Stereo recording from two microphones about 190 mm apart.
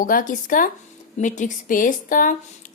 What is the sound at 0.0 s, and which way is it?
A woman's voice, 45° left (ahead or behind).